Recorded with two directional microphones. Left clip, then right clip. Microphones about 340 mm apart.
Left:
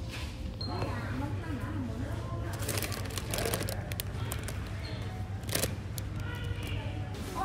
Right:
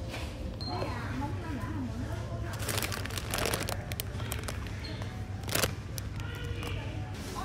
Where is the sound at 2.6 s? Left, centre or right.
Centre.